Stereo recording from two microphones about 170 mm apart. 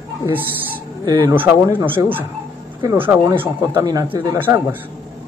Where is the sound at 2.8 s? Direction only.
10° right (ahead or behind).